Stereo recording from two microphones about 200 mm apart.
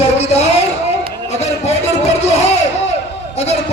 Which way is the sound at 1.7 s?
30° left (ahead or behind).